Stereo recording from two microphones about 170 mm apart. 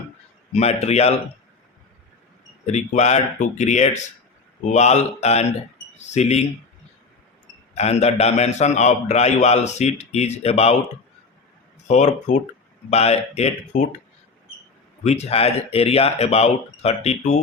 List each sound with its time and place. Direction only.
0.5 s a man's voice: 40° left (ahead or behind)
2.6 s a man's voice: 40° left (ahead or behind)
7.8 s a man's voice: 40° left (ahead or behind)
11.9 s a man's voice: 40° left (ahead or behind)
15.0 s a man's voice: 40° left (ahead or behind)